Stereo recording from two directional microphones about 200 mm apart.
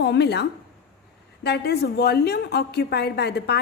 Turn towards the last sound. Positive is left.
turn(degrees=55)  # may be behind; listen again after turning